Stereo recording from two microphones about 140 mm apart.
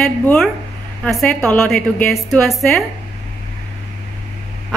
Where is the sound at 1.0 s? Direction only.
10° left (ahead or behind).